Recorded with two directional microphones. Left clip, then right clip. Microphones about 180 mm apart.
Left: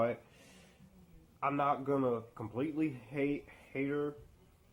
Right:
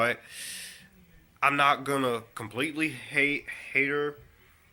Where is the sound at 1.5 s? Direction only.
15° right (ahead or behind).